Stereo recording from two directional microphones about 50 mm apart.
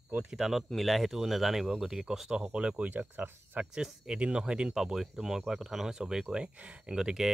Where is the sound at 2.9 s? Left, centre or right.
Right.